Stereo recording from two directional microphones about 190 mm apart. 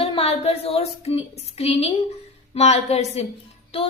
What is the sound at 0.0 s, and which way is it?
A woman's voice, 30° left (ahead or behind).